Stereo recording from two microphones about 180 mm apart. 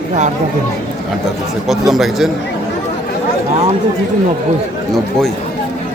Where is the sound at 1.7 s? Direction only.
Centre (ahead or behind).